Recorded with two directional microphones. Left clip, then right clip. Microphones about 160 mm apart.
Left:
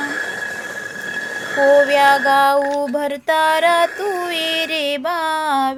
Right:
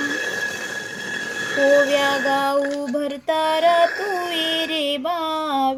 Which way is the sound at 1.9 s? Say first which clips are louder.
Left 6 dB; 40° left (ahead or behind).